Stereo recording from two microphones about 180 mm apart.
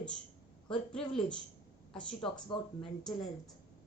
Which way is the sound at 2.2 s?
25° left (ahead or behind).